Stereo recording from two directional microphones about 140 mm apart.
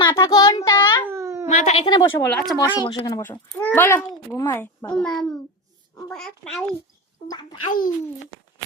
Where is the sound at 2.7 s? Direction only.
35° left (ahead or behind).